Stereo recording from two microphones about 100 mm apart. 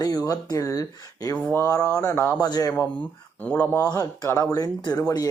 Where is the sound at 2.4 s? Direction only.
40° left (ahead or behind).